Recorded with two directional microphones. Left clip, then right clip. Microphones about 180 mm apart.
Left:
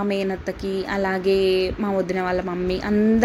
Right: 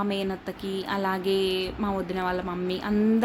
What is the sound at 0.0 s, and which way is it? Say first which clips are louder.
A woman's voice: left 5 dB; 10° left (ahead or behind).